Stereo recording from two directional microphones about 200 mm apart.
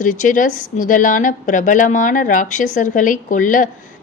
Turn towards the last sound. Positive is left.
turn(degrees=40)  # may be behind; listen again after turning